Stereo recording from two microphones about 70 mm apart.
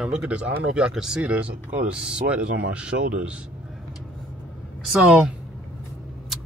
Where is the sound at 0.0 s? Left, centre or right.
Centre.